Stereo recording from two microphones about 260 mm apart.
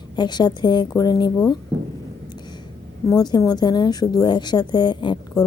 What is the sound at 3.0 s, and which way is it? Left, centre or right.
A woman's voice, centre.